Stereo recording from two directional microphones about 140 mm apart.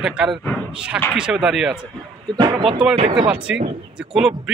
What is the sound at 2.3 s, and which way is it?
Speech, 35° right (ahead or behind).